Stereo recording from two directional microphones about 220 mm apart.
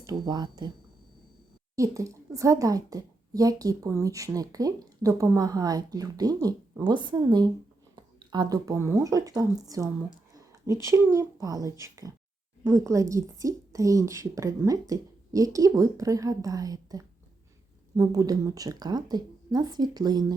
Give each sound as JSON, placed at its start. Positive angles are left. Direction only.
{"t": 0.0, "sound": "speech", "side_deg": -15}
{"t": 1.7, "sound": "a woman's voice", "side_deg": -15}